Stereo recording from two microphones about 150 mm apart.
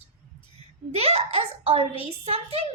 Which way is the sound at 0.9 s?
45° right (ahead or behind).